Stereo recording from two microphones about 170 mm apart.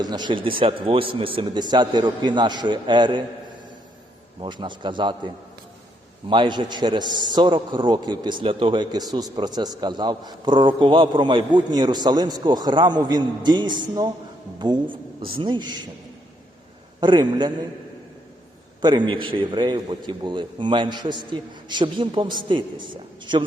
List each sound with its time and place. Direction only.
0.0 s a man's voice: 25° right (ahead or behind)
4.4 s a man's voice: 25° right (ahead or behind)
6.2 s a man's voice: 30° right (ahead or behind)
17.0 s a man's voice: 25° right (ahead or behind)
18.8 s a man's voice: 25° right (ahead or behind)